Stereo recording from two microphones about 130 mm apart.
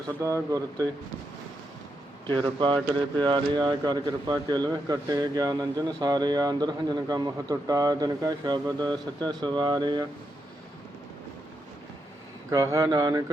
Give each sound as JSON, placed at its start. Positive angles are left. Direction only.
{"t": 0.2, "sound": "speech", "side_deg": -25}
{"t": 2.4, "sound": "speech", "side_deg": -35}
{"t": 12.5, "sound": "speech", "side_deg": -25}